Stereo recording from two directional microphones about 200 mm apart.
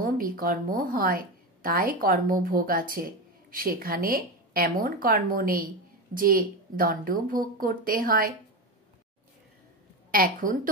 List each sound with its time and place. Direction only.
0.0 s a woman's voice: 45° right (ahead or behind)
10.1 s a woman's voice: 45° right (ahead or behind)